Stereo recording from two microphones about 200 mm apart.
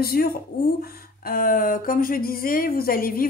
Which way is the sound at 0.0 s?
50° left (ahead or behind).